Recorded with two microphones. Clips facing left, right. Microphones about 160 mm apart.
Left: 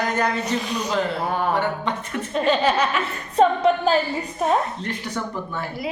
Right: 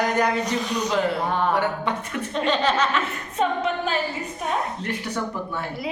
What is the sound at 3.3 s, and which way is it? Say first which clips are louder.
A capella: left 7 dB; 35° left (ahead or behind).